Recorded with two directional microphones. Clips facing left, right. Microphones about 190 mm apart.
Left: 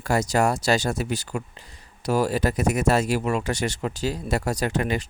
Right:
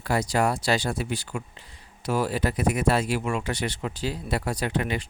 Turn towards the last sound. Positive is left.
turn(degrees=40)  # may be behind; listen again after turning